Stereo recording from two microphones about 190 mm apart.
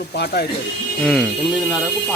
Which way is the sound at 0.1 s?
60° left (ahead or behind).